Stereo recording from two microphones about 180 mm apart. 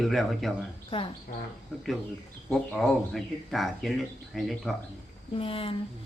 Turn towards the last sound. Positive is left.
turn(degrees=30)  # may be behind; listen again after turning